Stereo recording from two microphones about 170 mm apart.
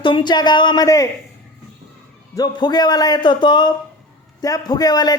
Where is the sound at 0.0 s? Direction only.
25° left (ahead or behind).